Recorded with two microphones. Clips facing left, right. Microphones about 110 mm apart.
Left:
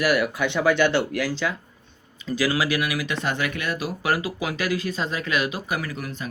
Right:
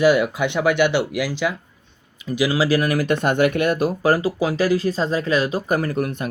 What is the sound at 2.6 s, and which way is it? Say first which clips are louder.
Speech: right 7 dB; 40° right (ahead or behind).